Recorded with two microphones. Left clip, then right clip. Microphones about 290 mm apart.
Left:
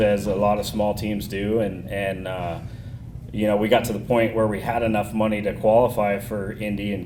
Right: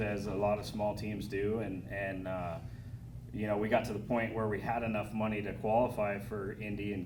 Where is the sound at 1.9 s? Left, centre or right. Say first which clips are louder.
Left 12 dB; left.